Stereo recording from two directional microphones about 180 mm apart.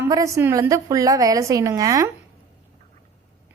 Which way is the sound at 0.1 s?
15° right (ahead or behind).